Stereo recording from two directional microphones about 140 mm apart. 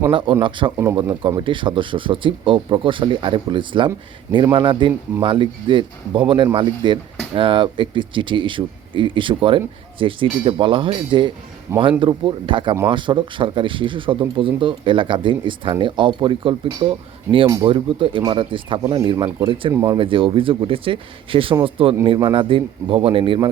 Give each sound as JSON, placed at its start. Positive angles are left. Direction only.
{"t": 0.1, "sound": "speech", "side_deg": -35}
{"t": 18.8, "sound": "speech", "side_deg": -20}
{"t": 20.0, "sound": "speech", "side_deg": -40}